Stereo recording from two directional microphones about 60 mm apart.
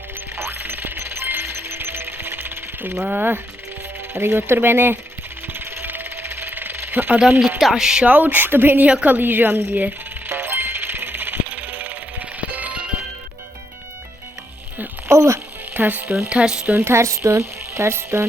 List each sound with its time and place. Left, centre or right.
0.3 s music: right
3.0 s speech: right
5.5 s a sound: right
7.6 s speech: centre
8.0 s speech: right
8.9 s music: right
14.8 s a sound: right
15.7 s speech: right
16.3 s speech: centre
16.7 s speech: right